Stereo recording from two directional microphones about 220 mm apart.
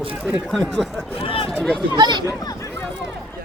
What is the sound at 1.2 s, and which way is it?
Speech, 25° left (ahead or behind).